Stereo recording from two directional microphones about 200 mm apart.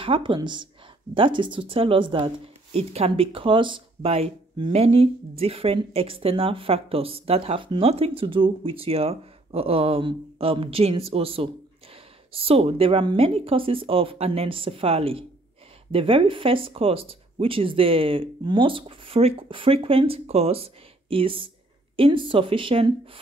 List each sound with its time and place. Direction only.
0.0 s speech: 25° right (ahead or behind)